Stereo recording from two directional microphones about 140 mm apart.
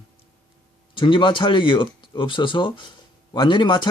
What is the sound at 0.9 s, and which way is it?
Speech, 35° left (ahead or behind).